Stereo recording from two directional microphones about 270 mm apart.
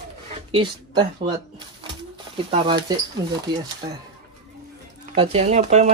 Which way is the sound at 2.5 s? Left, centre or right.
Centre.